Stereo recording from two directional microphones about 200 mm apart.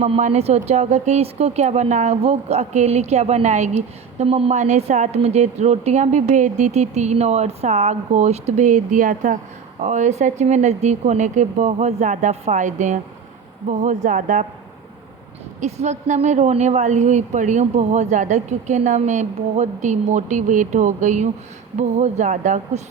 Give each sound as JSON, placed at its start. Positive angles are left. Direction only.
{"t": 0.0, "sound": "speech", "side_deg": -35}
{"t": 15.6, "sound": "speech", "side_deg": -35}